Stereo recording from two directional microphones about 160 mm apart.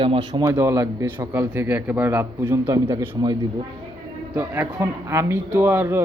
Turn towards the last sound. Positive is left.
turn(degrees=-15)  # may be behind; listen again after turning